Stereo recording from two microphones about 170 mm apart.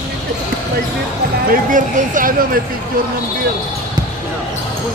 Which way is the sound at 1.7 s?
50° right (ahead or behind).